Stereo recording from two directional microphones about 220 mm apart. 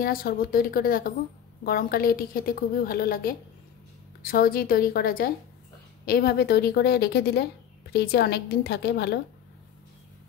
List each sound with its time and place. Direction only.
0.0 s a woman's voice: 40° left (ahead or behind)